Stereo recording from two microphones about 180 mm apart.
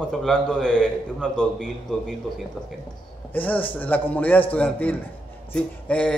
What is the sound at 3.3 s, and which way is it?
A man's voice, 10° left (ahead or behind).